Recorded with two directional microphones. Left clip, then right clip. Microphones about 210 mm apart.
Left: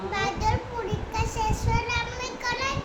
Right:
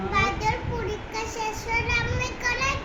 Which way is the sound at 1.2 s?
15° left (ahead or behind).